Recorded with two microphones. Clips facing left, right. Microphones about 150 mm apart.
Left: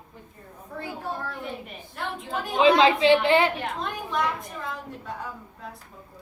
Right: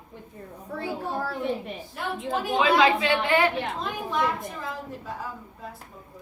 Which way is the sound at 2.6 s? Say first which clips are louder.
Left 4 dB; 25° left (ahead or behind).